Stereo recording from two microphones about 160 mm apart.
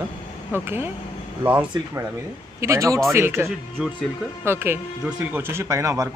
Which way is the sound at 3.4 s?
Centre (ahead or behind).